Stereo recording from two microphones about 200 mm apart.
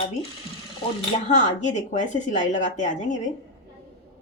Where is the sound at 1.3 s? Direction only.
35° left (ahead or behind).